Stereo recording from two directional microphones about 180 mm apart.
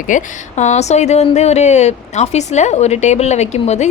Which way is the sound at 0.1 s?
45° left (ahead or behind).